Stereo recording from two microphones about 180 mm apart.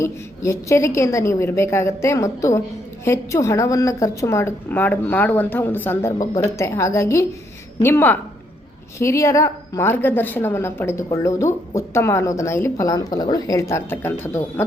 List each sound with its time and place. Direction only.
0.0 s a woman's voice: 15° left (ahead or behind)